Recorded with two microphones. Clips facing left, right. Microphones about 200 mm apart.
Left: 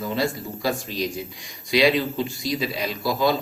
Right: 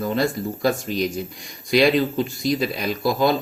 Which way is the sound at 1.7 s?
50° right (ahead or behind).